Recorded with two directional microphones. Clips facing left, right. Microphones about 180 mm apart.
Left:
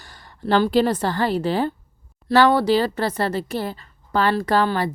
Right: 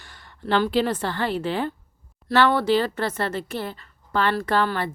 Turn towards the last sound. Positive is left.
turn(degrees=35)  # may be behind; listen again after turning